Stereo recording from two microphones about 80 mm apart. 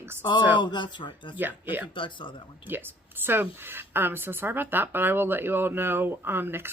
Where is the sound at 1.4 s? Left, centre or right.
Right.